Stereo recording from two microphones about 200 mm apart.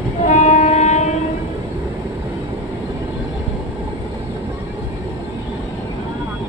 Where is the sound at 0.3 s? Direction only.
35° left (ahead or behind).